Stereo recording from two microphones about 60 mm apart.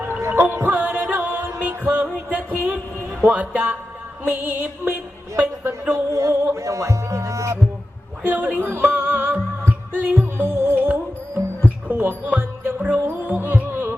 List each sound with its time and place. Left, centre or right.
0.2 s music: right
6.1 s music: right
8.2 s music: right